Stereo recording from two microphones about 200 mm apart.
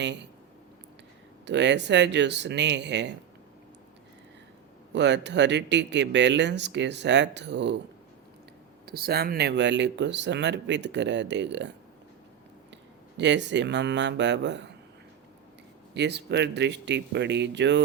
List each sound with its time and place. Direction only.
1.5 s speech: 60° right (ahead or behind)
4.9 s speech: 60° right (ahead or behind)
8.9 s speech: 50° right (ahead or behind)
13.1 s speech: 60° right (ahead or behind)
16.0 s speech: 55° right (ahead or behind)